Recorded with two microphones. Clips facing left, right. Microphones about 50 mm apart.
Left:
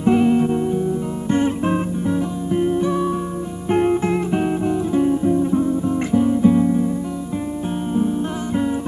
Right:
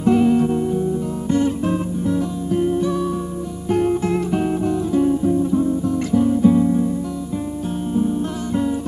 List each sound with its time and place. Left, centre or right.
0.0 s music: left
7.9 s music: left